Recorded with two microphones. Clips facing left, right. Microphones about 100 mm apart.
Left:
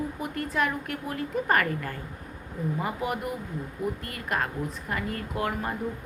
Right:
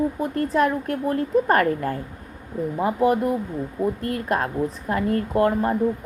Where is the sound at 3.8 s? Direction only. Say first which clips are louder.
Right 9 dB; 40° right (ahead or behind).